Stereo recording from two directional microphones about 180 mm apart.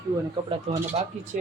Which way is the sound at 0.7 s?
35° right (ahead or behind).